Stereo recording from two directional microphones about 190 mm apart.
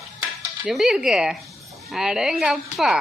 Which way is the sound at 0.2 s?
5° right (ahead or behind).